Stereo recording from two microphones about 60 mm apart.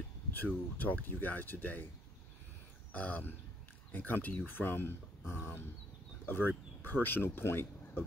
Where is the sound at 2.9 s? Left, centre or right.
Left.